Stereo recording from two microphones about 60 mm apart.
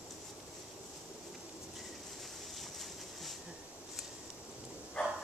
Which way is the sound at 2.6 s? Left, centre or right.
Centre.